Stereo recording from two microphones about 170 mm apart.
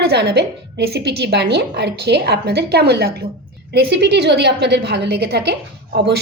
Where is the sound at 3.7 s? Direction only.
85° right.